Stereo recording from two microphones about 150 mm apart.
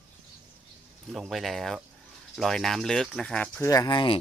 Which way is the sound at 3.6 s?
25° left (ahead or behind).